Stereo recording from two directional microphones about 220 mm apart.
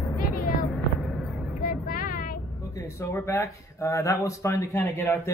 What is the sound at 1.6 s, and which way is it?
Vehicle, 40° left (ahead or behind).